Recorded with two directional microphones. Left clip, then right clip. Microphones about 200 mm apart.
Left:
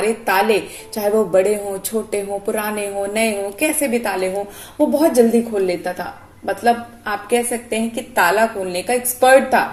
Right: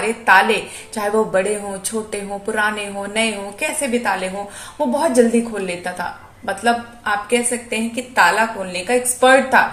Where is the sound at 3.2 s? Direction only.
25° left (ahead or behind).